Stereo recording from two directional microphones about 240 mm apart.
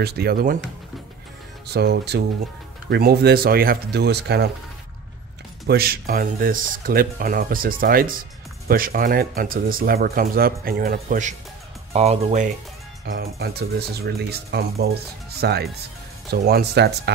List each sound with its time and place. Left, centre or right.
0.0 s speech: right
1.7 s speech: right
5.7 s speech: right
13.0 s speech: right